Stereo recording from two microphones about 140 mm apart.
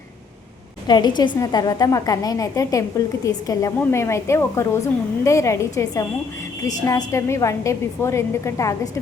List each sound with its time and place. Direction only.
0.9 s a woman's voice: 30° left (ahead or behind)